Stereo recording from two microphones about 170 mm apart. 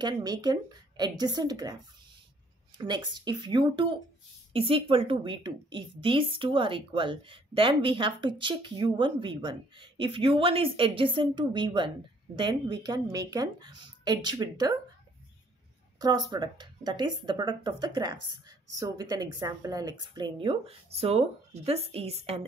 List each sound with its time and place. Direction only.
0.0 s a woman's voice: 25° right (ahead or behind)
2.8 s a woman's voice: 25° right (ahead or behind)
16.0 s a woman's voice: 25° right (ahead or behind)